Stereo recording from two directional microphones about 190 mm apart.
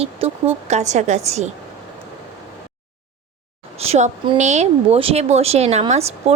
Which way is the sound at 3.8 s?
35° right (ahead or behind).